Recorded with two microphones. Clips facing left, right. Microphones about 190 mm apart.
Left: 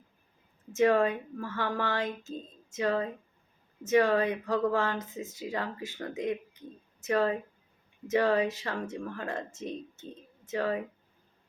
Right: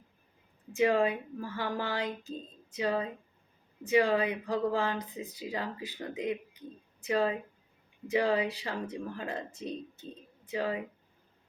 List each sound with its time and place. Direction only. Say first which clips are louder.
0.8 s speech: left 2 dB; 15° right (ahead or behind)
10.5 s speech: left 2 dB; 15° right (ahead or behind)